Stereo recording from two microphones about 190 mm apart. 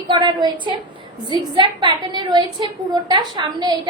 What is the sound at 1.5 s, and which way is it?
A woman's voice, 25° right (ahead or behind).